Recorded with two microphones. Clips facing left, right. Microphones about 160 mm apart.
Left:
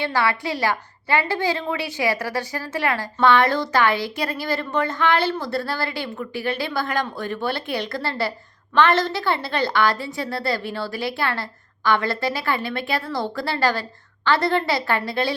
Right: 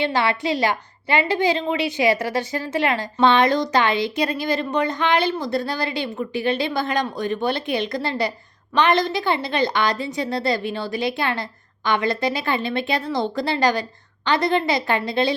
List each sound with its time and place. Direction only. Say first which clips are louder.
0.0 s a woman's voice: right 2 dB; 20° right (ahead or behind)